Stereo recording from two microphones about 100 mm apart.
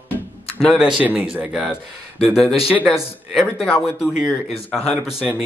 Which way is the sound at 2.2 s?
Centre (ahead or behind).